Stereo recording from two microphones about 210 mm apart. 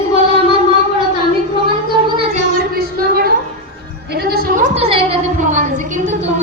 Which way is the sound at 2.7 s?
45° right (ahead or behind).